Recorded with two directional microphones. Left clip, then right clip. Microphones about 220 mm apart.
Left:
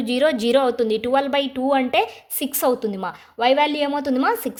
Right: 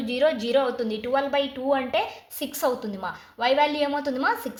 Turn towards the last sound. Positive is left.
turn(degrees=45)  # may be behind; listen again after turning